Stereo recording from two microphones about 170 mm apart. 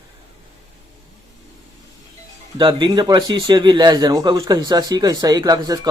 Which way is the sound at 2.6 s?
25° right (ahead or behind).